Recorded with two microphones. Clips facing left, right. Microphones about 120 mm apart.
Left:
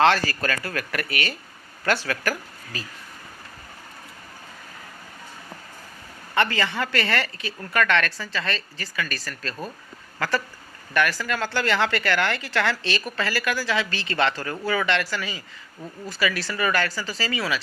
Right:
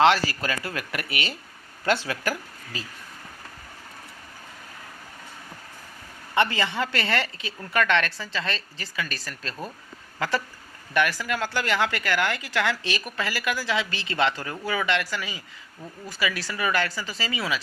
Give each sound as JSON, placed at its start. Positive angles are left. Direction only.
{"t": 0.0, "sound": "a woman's voice", "side_deg": -15}
{"t": 6.3, "sound": "a woman's voice", "side_deg": -20}